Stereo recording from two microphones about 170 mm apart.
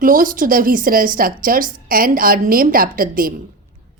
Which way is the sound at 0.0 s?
55° right (ahead or behind).